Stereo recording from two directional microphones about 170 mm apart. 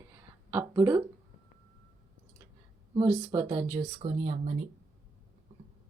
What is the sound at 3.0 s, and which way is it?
Speech, 25° right (ahead or behind).